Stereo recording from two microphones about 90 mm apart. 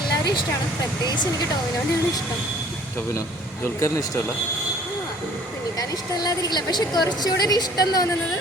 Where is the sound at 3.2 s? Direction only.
35° left (ahead or behind).